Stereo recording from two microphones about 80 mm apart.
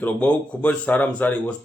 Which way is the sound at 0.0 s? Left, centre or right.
Centre.